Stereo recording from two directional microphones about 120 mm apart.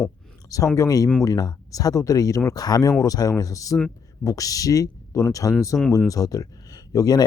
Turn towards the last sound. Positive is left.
turn(degrees=30)  # may be behind; listen again after turning